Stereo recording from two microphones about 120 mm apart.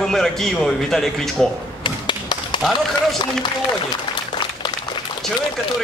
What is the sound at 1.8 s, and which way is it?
Tap, 40° left (ahead or behind).